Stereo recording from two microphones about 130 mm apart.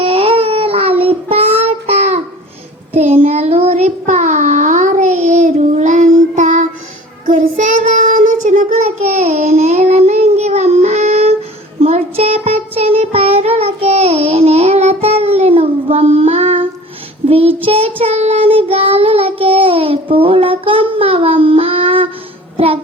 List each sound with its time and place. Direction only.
0.0 s child singing: 45° right (ahead or behind); by 8.5 s 80° right
9.0 s child singing: 60° right (ahead or behind); by 22.1 s 45° right (ahead or behind)
22.5 s music: 45° right (ahead or behind)